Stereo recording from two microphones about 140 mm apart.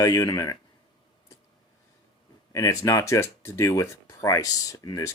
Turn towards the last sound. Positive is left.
turn(degrees=25)  # may be behind; listen again after turning